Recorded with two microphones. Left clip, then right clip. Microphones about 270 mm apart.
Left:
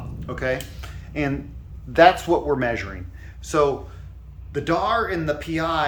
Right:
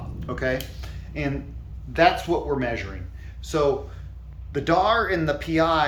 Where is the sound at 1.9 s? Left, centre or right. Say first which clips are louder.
Left 4 dB; left.